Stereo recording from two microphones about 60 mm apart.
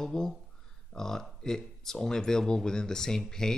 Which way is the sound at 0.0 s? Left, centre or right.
Centre.